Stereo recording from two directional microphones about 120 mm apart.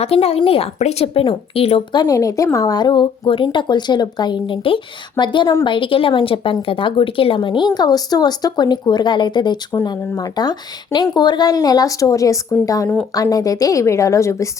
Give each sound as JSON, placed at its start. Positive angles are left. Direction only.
{"t": 0.0, "sound": "speech", "side_deg": 55}
{"t": 1.9, "sound": "a woman's voice", "side_deg": 35}